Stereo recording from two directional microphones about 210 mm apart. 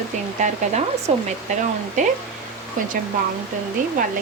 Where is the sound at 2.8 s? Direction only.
40° right (ahead or behind).